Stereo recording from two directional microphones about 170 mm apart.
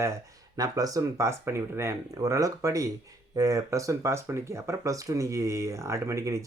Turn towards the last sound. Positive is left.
turn(degrees=-20)  # may be behind; listen again after turning